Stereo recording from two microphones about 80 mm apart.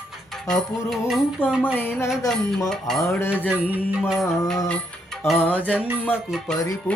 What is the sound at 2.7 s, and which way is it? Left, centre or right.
Music, centre.